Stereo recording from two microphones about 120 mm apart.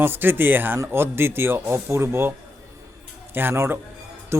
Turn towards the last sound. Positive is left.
turn(degrees=-20)  # may be behind; listen again after turning